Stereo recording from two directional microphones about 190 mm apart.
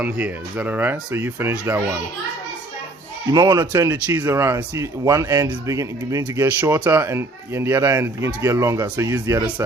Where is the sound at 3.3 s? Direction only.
15° right (ahead or behind).